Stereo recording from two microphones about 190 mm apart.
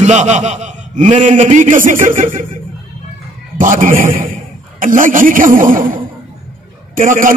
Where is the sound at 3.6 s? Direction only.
45° right (ahead or behind).